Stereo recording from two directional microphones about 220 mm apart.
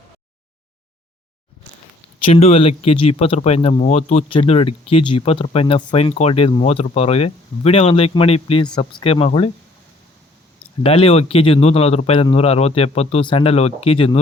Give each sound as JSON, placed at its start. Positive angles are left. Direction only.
{"t": 2.1, "sound": "speech", "side_deg": 30}
{"t": 10.8, "sound": "speech", "side_deg": 25}